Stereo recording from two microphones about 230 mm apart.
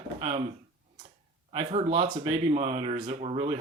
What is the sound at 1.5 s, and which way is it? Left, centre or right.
Speech, right.